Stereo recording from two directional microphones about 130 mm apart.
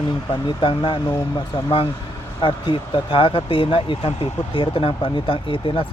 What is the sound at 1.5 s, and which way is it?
Speech, 45° left (ahead or behind).